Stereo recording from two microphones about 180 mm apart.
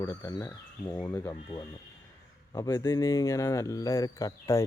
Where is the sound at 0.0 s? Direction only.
20° left (ahead or behind).